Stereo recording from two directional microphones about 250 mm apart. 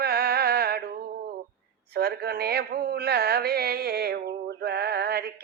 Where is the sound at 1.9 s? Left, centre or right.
Right.